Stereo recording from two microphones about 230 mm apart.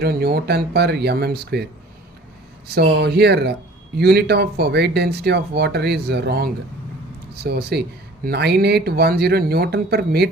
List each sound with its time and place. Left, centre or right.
0.0 s speech: right
2.6 s speech: right